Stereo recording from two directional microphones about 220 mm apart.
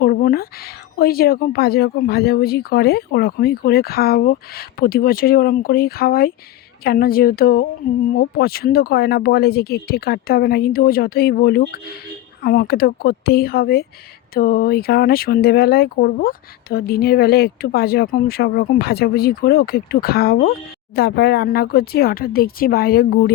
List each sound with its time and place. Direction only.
0.0 s speech: 40° left (ahead or behind)